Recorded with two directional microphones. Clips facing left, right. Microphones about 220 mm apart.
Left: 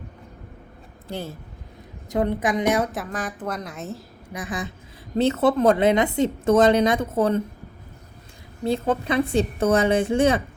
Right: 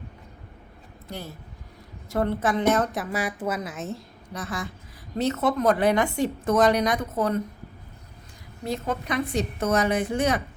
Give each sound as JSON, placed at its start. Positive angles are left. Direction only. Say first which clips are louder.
{"t": 1.0, "sound": "a woman's voice", "louder": "left 5 dB", "side_deg": 30}
{"t": 2.0, "sound": "a woman's voice", "louder": "left 2 dB", "side_deg": 15}
{"t": 2.9, "sound": "a woman's voice", "louder": "right 1 dB", "side_deg": -5}
{"t": 4.3, "sound": "a woman's voice", "louder": "left 2 dB", "side_deg": 15}
{"t": 5.1, "sound": "a woman's voice", "louder": "left 5 dB", "side_deg": 30}
{"t": 8.9, "sound": "a woman's voice", "louder": "left 4 dB", "side_deg": 30}